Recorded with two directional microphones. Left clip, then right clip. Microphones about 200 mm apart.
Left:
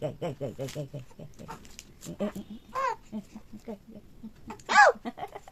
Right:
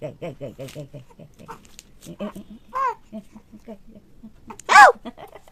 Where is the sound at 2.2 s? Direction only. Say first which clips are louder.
Even; 10° right (ahead or behind).